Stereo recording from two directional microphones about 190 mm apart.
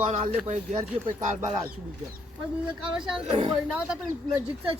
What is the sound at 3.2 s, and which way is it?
Speech, 30° right (ahead or behind).